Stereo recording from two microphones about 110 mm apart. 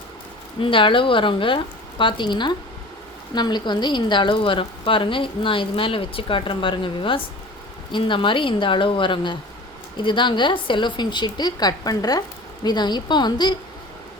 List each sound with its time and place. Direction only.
0.6 s a woman's voice: 50° left (ahead or behind)